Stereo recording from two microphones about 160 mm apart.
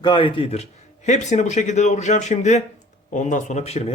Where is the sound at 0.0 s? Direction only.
30° left (ahead or behind).